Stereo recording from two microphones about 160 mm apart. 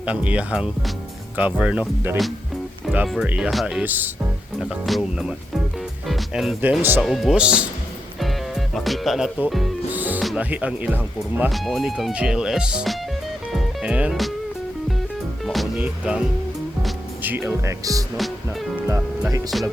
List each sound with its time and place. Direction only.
0.0 s speech: 10° right (ahead or behind)
4.6 s speech: centre (ahead or behind)
7.0 s speech: centre (ahead or behind)
8.2 s music: centre (ahead or behind)
10.2 s speech: 10° right (ahead or behind)
13.5 s music: 5° right (ahead or behind)
15.8 s music: 5° right (ahead or behind)
17.2 s speech: 15° right (ahead or behind)